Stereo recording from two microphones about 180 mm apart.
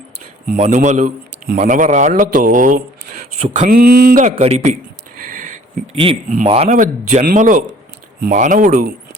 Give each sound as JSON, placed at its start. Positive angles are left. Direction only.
{"t": 0.4, "sound": "speech", "side_deg": -45}
{"t": 3.7, "sound": "speech", "side_deg": -55}
{"t": 5.3, "sound": "a sound", "side_deg": -45}
{"t": 5.9, "sound": "speech", "side_deg": -30}